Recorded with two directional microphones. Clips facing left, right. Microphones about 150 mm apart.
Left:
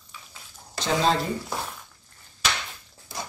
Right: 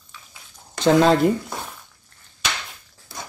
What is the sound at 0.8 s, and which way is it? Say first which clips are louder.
Speech: right 9 dB; 60° right (ahead or behind).